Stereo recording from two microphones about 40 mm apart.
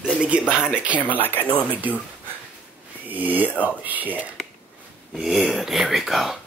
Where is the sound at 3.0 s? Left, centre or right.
Right.